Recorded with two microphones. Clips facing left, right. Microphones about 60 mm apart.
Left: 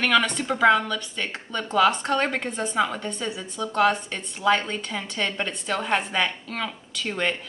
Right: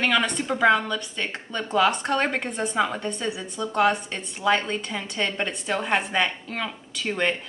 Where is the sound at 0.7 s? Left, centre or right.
Centre.